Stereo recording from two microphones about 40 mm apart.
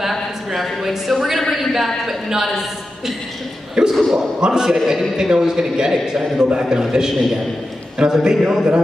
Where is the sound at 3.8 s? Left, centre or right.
Right.